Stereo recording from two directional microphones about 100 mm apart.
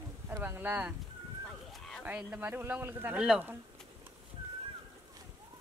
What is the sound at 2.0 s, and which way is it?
Speech, 15° right (ahead or behind).